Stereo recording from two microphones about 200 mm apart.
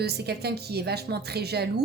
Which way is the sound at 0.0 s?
55° right (ahead or behind).